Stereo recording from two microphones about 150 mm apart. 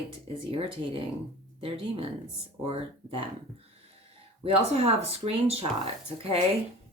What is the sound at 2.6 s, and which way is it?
Speech, 35° right (ahead or behind).